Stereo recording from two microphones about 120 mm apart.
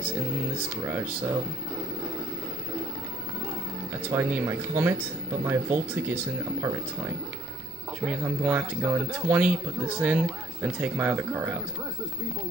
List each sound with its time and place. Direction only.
0.6 s speech: 10° right (ahead or behind)
4.1 s speech: 15° right (ahead or behind)